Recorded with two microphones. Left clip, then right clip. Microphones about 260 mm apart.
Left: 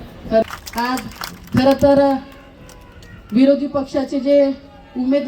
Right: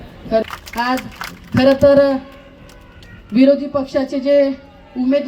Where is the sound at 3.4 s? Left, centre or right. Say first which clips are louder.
Right 2 dB; right.